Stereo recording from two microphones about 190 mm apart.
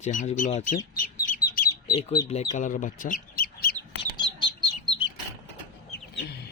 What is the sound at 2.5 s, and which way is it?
Chicken, 40° left (ahead or behind).